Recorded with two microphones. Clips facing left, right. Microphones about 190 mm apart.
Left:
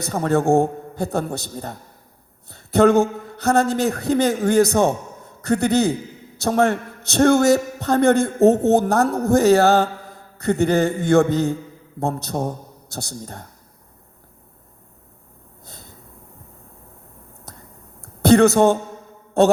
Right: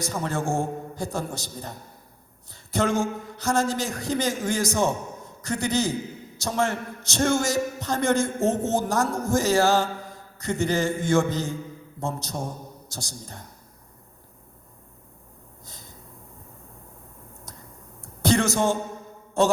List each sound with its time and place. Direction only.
0.0 s a man's voice: 60° left (ahead or behind)
15.6 s snort: 60° left (ahead or behind)
18.0 s a sound: 60° left (ahead or behind)
19.4 s a man's voice: 60° left (ahead or behind)